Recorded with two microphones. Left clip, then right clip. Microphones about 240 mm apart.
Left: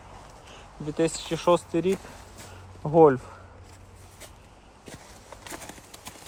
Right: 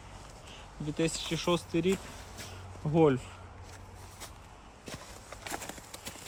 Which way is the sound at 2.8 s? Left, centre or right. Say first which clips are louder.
Left 9 dB; left.